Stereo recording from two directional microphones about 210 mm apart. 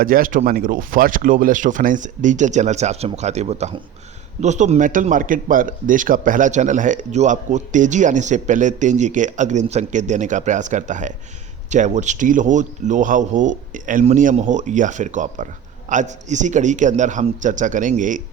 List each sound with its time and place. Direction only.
0.0 s a man's voice: 40° right (ahead or behind)